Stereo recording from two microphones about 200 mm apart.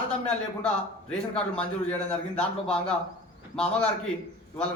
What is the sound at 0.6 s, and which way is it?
A man's voice, 5° left (ahead or behind).